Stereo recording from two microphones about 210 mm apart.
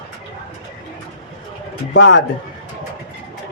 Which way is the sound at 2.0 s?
60° left (ahead or behind).